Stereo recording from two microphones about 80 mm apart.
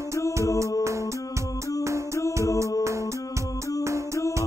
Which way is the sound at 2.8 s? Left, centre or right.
Right.